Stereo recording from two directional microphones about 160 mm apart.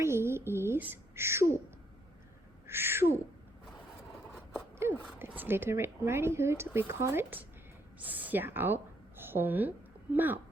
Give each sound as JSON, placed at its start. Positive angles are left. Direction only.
{"t": 0.0, "sound": "a sound", "side_deg": -15}
{"t": 2.6, "sound": "owl", "side_deg": -15}
{"t": 5.0, "sound": "a woman's voice", "side_deg": -10}